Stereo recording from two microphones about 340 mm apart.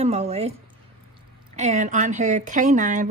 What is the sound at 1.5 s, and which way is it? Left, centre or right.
Speech, right.